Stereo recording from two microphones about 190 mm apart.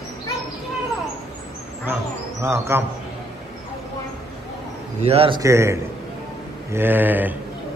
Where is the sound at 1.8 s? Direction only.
10° right (ahead or behind).